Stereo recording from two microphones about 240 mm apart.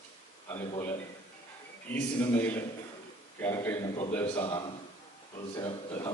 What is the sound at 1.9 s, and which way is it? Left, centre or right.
A man's voice, centre.